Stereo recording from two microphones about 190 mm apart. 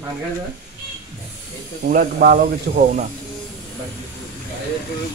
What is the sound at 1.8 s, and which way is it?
Speech, 50° right (ahead or behind).